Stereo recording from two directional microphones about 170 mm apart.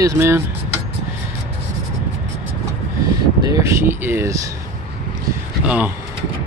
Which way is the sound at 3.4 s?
20° right (ahead or behind).